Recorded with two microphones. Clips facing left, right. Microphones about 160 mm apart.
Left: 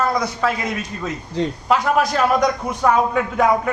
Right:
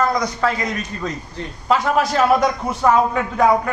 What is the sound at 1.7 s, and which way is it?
A man's voice, centre (ahead or behind).